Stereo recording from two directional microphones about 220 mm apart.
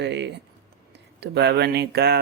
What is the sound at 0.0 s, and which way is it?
Speech, 50° right (ahead or behind).